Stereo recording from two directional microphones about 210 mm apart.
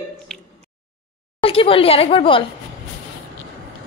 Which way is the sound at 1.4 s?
25° left (ahead or behind).